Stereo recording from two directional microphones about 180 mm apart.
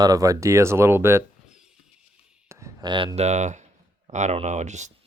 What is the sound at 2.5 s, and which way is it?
Speech, 20° right (ahead or behind).